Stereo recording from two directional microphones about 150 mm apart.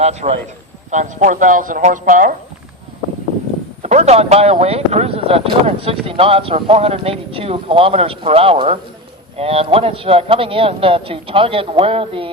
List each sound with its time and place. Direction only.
0.0 s a man's voice: 45° right (ahead or behind); by 2.3 s 65° right (ahead or behind)
3.8 s speech: 45° right (ahead or behind)